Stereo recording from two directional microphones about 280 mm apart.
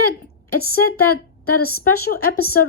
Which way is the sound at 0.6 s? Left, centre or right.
Left.